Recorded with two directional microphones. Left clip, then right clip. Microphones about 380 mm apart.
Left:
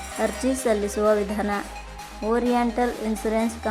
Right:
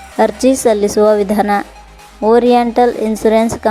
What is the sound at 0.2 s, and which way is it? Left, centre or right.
Speech, centre.